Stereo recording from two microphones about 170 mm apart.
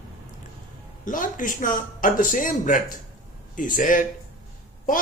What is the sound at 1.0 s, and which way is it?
Speech, 50° left (ahead or behind).